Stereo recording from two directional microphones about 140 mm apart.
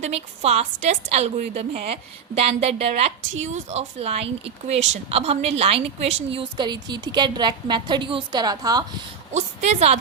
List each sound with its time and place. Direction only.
0.0 s a woman's voice: 50° right (ahead or behind); by 8.8 s 30° right (ahead or behind)
9.3 s a woman's voice: 55° right (ahead or behind)